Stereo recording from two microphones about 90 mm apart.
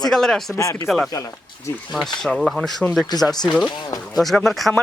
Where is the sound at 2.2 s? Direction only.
Centre (ahead or behind).